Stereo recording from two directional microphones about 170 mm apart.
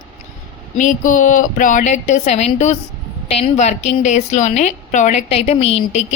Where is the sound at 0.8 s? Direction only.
50° left (ahead or behind).